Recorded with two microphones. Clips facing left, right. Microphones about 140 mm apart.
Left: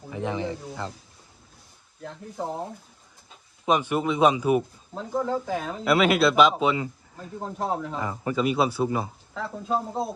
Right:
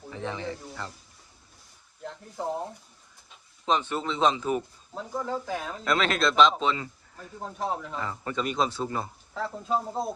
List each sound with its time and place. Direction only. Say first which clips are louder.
0.1 s speech: left 5 dB; 15° left (ahead or behind)
2.0 s speech: even; 5° left (ahead or behind)
3.7 s speech: left 4 dB; 10° left (ahead or behind)
5.2 s speech: left 3 dB; centre (ahead or behind); by 7.4 s 15° left (ahead or behind)
7.7 s speech: left 4 dB; 5° left (ahead or behind)
7.9 s speech: left 4 dB; 15° left (ahead or behind)